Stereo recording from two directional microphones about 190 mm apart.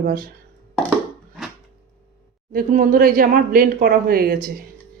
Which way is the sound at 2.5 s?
50° right (ahead or behind).